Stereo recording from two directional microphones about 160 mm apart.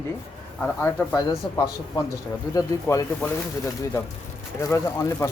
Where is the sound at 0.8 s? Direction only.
15° left (ahead or behind).